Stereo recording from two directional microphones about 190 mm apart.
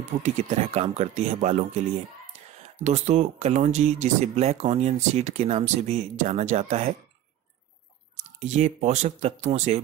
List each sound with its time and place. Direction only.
0.2 s speech: 40° right (ahead or behind)
8.2 s speech: 40° right (ahead or behind)